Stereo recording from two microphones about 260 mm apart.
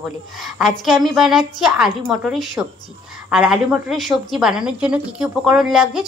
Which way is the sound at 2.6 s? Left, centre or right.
Centre.